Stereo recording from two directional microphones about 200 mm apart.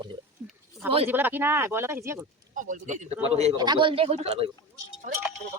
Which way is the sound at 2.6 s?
40° right (ahead or behind).